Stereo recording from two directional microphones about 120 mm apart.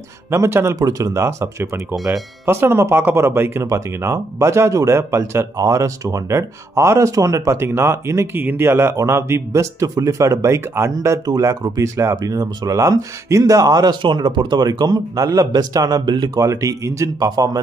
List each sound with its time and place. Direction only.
0.3 s speech: 20° right (ahead or behind)